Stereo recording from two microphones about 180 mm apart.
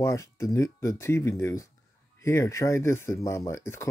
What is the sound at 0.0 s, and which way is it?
Speech, 15° left (ahead or behind).